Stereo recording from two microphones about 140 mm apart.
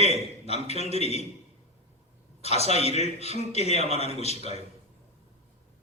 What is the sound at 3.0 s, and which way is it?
Speech, 50° left (ahead or behind).